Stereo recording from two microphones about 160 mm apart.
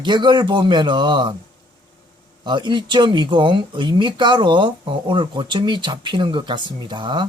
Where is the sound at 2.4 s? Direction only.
30° right (ahead or behind).